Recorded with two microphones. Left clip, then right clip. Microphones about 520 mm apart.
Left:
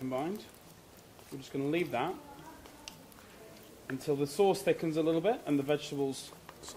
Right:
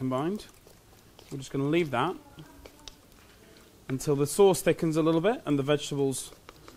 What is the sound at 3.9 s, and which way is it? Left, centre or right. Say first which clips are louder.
Speech: right 5 dB; right.